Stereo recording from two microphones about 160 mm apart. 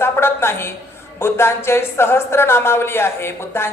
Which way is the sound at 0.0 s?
15° left (ahead or behind).